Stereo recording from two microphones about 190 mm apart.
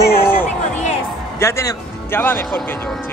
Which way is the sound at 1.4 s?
15° left (ahead or behind).